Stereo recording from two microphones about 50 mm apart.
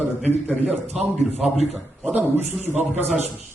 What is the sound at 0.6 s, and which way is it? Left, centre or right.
Speech, right.